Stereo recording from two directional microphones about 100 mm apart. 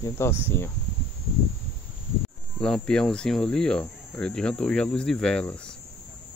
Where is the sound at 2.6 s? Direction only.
5° left (ahead or behind).